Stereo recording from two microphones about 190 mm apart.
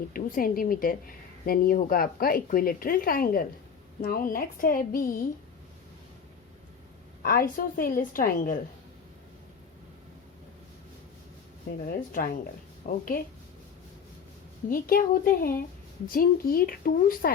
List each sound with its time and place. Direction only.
0.1 s speech: 45° left (ahead or behind)
7.2 s speech: 50° left (ahead or behind)
11.9 s a woman's voice: 45° left (ahead or behind)
14.7 s speech: 50° left (ahead or behind)